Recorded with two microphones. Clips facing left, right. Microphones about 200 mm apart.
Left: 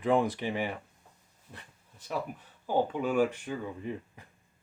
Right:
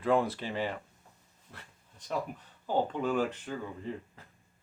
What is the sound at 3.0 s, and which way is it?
Speech, 10° left (ahead or behind).